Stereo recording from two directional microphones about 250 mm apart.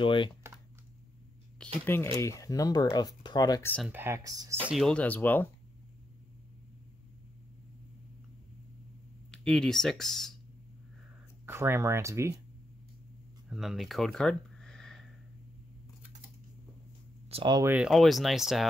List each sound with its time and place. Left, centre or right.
0.0 s speech: centre
1.6 s speech: centre
3.9 s speech: centre
4.7 s speech: centre
9.3 s speech: centre
11.4 s speech: centre
13.5 s a sound: centre
17.3 s speech: centre